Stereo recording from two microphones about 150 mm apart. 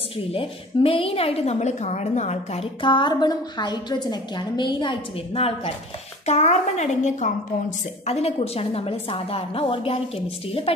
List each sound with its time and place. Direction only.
0.3 s a woman's voice: 40° left (ahead or behind)